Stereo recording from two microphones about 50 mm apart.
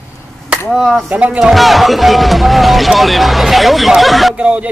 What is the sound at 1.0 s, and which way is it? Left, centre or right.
Speech, right.